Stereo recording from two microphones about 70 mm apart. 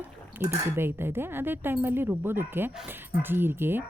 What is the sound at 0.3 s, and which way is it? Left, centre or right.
Speech, right.